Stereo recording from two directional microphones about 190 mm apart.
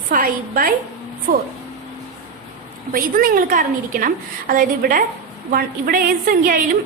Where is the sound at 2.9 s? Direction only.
50° right (ahead or behind).